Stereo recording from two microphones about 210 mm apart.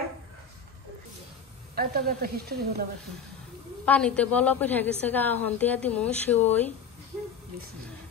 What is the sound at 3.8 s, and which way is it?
A woman's voice, 5° left (ahead or behind).